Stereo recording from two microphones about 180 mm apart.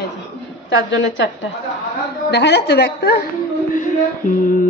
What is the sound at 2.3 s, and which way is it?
Speech, 70° left (ahead or behind).